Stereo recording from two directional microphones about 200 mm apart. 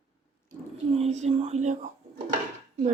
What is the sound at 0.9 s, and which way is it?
A woman's voice, 35° right (ahead or behind).